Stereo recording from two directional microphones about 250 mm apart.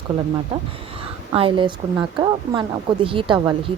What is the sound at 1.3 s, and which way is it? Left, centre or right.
A woman's voice, right.